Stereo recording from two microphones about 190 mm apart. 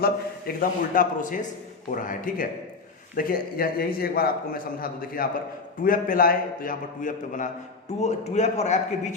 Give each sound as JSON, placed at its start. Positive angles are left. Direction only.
{"t": 0.0, "sound": "a man's voice", "side_deg": 50}